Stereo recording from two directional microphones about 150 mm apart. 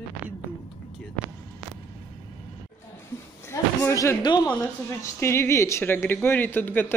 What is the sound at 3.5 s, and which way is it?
Speech, 20° left (ahead or behind).